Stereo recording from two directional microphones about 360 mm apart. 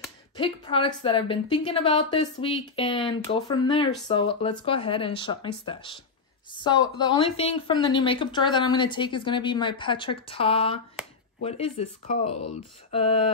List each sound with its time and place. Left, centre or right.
0.4 s speech: centre
12.9 s speech: centre